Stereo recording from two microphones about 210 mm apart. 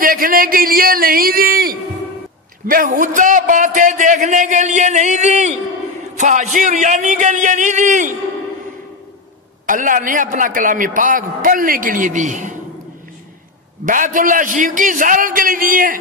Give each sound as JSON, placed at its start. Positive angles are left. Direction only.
{"t": 0.0, "sound": "a man's voice", "side_deg": -40}
{"t": 9.7, "sound": "a man's voice", "side_deg": -40}
{"t": 13.8, "sound": "a man's voice", "side_deg": -40}